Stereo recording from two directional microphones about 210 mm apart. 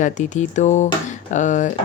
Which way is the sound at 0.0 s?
35° left (ahead or behind).